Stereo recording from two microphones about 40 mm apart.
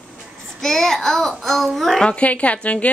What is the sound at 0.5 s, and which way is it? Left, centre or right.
Child singing, centre.